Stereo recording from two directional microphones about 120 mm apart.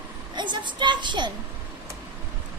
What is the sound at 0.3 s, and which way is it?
Speech, 40° right (ahead or behind).